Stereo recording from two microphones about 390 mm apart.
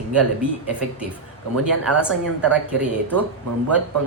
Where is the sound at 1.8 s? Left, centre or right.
Centre.